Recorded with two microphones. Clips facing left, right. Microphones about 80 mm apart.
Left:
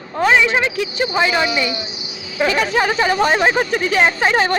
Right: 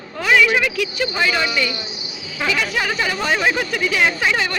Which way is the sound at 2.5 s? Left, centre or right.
Left.